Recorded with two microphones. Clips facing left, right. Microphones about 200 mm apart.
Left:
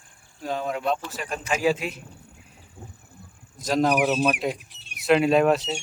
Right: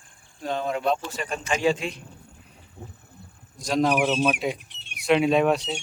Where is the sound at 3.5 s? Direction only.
Centre (ahead or behind).